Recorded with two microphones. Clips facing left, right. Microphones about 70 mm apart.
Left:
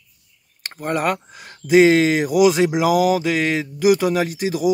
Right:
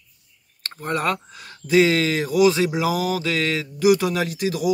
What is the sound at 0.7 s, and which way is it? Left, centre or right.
Speech, centre.